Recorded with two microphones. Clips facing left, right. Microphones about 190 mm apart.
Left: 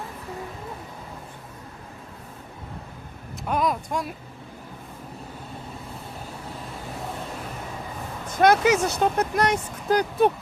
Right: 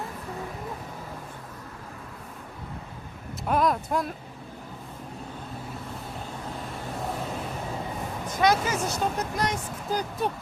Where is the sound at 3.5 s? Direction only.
Centre (ahead or behind).